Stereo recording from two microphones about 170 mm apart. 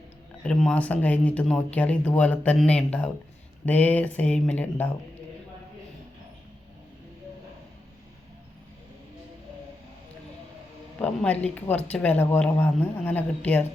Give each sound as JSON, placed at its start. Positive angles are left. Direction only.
{"t": 0.4, "sound": "speech", "side_deg": 5}
{"t": 11.0, "sound": "speech", "side_deg": 10}